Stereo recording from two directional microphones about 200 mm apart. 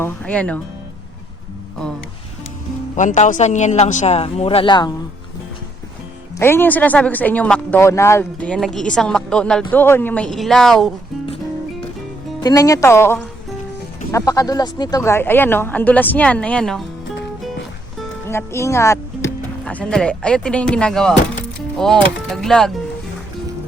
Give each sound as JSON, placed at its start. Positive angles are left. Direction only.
{"t": 0.0, "sound": "speech", "side_deg": 5}
{"t": 2.9, "sound": "a man's voice", "side_deg": 40}
{"t": 6.3, "sound": "speech", "side_deg": 10}
{"t": 12.4, "sound": "speech", "side_deg": 20}
{"t": 18.3, "sound": "speech", "side_deg": 15}